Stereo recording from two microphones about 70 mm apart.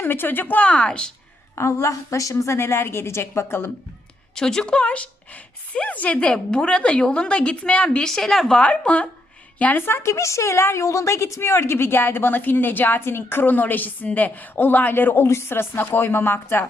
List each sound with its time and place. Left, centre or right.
0.0 s a woman's voice: left; by 1.1 s centre
1.5 s a woman's voice: left
4.4 s a woman's voice: centre; by 16.6 s left